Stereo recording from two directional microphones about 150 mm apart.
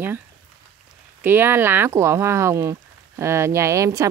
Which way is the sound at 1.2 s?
15° right (ahead or behind).